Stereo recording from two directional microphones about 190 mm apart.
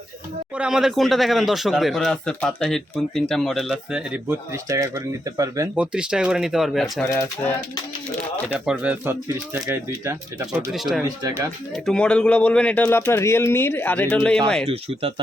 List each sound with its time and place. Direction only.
0.5 s speech: 5° right (ahead or behind)
5.7 s speech: 5° right (ahead or behind)
7.0 s speech: 15° left (ahead or behind)
8.5 s speech: 5° right (ahead or behind)
10.7 s speech: centre (ahead or behind)
14.7 s speech: 30° right (ahead or behind)